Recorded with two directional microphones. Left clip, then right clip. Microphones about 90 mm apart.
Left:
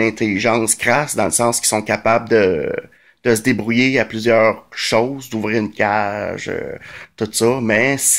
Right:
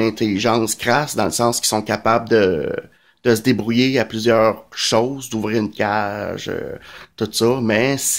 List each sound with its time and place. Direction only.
0.0 s speech: 20° right (ahead or behind)